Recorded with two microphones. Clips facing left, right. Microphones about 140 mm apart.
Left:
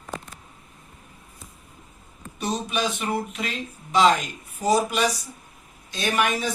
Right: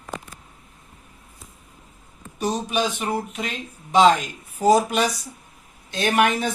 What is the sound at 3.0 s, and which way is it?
Speech, 35° right (ahead or behind).